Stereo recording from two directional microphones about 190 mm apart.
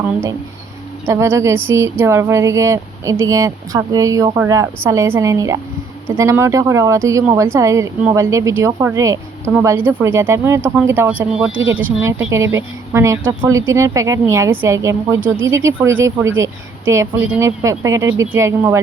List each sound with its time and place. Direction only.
1.0 s a woman's voice: 15° right (ahead or behind)